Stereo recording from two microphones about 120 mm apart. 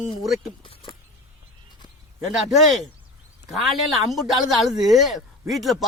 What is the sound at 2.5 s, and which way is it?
Speech, centre (ahead or behind).